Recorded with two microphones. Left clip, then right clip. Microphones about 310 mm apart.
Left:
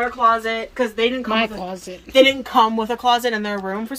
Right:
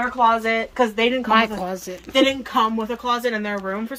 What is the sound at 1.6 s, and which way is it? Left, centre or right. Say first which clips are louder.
Speech: right 2 dB; centre.